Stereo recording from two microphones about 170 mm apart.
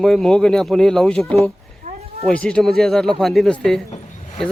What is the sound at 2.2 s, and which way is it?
Speech, 5° left (ahead or behind).